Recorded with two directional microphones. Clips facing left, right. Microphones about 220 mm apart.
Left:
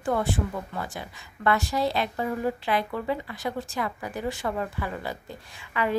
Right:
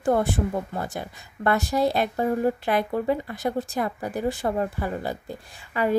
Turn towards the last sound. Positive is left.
turn(degrees=-40)  # may be behind; listen again after turning